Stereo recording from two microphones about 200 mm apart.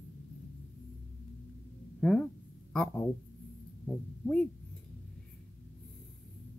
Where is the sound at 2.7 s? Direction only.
5° left (ahead or behind).